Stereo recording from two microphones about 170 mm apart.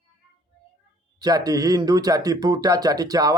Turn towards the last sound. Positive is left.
turn(degrees=-20)  # may be behind; listen again after turning